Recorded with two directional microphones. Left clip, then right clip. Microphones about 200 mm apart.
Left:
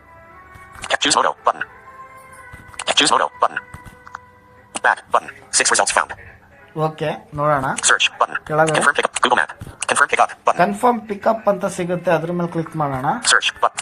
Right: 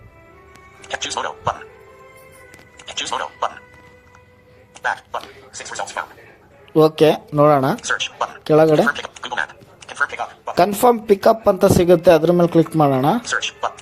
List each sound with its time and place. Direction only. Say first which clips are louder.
0.9 s speech: left 8 dB; 50° left (ahead or behind)
2.7 s speech: left 9 dB; 50° left (ahead or behind)
4.8 s a man's voice: left 7 dB; 50° left (ahead or behind)
6.7 s speech: right 9 dB; 45° right (ahead or behind)
7.9 s a man's voice: left 6 dB; 50° left (ahead or behind)
8.4 s speech: right 6 dB; 50° right (ahead or behind)
8.9 s speech: left 7 dB; 50° left (ahead or behind)
10.6 s speech: right 6 dB; 45° right (ahead or behind)
13.3 s a man's voice: left 6 dB; 50° left (ahead or behind)